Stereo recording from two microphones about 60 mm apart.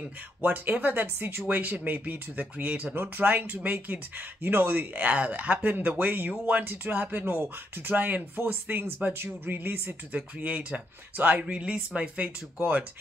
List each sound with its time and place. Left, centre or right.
0.4 s speech: right